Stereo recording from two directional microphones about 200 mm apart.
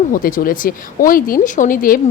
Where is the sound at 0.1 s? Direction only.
45° left (ahead or behind).